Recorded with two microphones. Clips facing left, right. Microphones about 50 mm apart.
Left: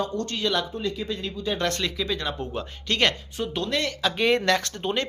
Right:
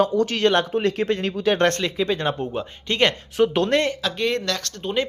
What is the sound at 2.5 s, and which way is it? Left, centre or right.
Speech, right.